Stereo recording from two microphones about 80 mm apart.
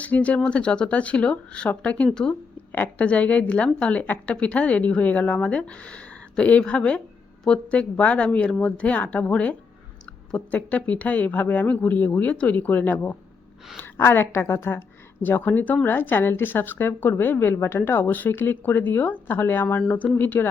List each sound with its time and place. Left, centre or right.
0.0 s a woman's voice: centre